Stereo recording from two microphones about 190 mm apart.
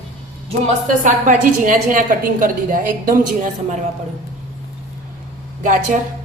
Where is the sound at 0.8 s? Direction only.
45° right (ahead or behind).